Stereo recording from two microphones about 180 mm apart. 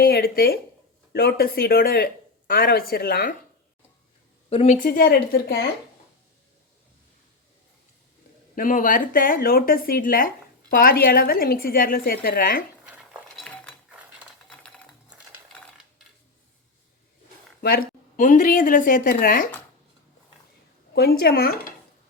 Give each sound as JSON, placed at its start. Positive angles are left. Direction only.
{"t": 0.0, "sound": "speech", "side_deg": 60}
{"t": 4.4, "sound": "speech", "side_deg": 35}
{"t": 8.5, "sound": "speech", "side_deg": 50}
{"t": 12.8, "sound": "chink", "side_deg": -5}
{"t": 13.9, "sound": "a sound", "side_deg": 0}
{"t": 17.6, "sound": "speech", "side_deg": 55}
{"t": 20.9, "sound": "speech", "side_deg": 60}